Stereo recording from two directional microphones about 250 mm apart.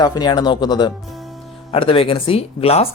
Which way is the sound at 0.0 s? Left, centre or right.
Centre.